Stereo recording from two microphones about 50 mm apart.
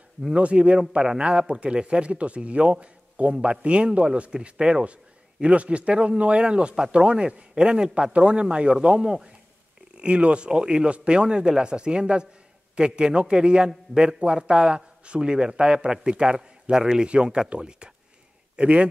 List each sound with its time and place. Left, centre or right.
0.3 s a man's voice: right